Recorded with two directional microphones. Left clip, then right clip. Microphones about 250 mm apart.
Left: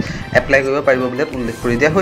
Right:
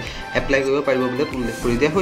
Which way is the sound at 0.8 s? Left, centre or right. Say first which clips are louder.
Left 5 dB; centre.